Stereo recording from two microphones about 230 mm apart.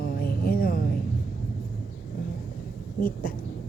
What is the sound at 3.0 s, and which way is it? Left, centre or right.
Speech, left.